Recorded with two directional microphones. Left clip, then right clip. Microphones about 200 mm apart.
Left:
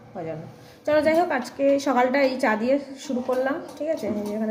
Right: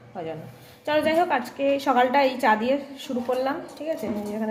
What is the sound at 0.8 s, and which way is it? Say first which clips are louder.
A woman's voice: left 2 dB; 5° right (ahead or behind).